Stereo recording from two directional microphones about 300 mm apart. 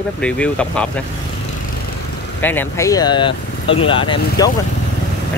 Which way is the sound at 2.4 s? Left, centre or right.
Centre.